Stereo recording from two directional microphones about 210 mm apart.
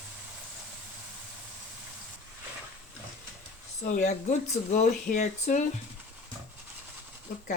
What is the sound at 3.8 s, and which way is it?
Speech, 35° left (ahead or behind).